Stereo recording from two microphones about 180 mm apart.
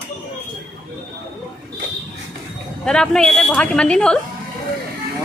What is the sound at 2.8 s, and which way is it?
A woman's voice, 5° left (ahead or behind).